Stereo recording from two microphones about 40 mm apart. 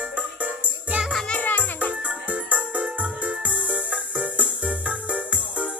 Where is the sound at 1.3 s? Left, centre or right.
Left.